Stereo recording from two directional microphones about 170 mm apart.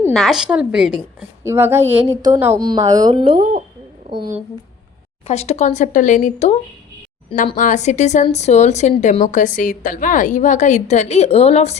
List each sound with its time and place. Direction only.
0.1 s a woman's voice: centre (ahead or behind); by 3.4 s 30° right (ahead or behind)
5.3 s a woman's voice: 40° left (ahead or behind)